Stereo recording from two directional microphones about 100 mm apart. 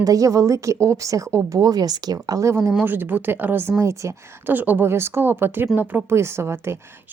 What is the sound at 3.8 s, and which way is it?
Speech, 30° right (ahead or behind).